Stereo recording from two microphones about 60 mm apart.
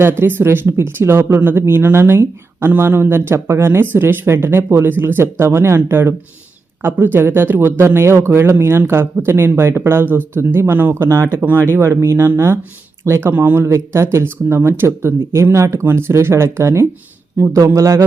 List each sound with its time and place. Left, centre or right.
0.0 s speech: right
13.3 s speech: right
13.7 s speech: right
17.7 s speech: right